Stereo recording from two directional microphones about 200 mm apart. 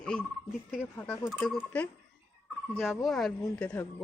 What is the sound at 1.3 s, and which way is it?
Fowl, 5° left (ahead or behind).